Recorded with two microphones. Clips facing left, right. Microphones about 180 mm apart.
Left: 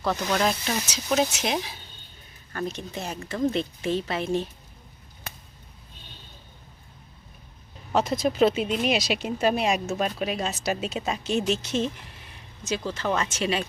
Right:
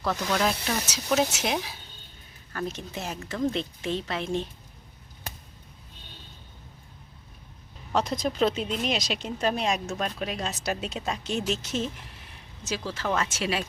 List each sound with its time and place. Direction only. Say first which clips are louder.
0.3 s speech: left 1 dB; centre (ahead or behind)
7.9 s speech: left 4 dB; 5° left (ahead or behind)